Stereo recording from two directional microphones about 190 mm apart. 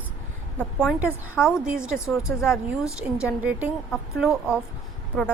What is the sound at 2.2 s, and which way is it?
Speech, 15° left (ahead or behind).